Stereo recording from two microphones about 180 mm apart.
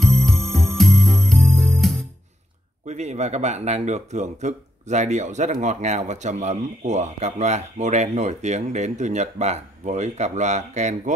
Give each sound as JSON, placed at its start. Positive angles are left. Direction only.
{"t": 0.0, "sound": "music", "side_deg": 0}
{"t": 2.9, "sound": "speech", "side_deg": -40}